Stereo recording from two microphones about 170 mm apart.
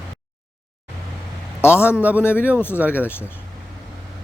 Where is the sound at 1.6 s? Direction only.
15° left (ahead or behind).